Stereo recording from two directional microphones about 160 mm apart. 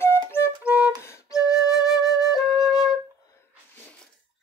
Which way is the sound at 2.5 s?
Centre (ahead or behind).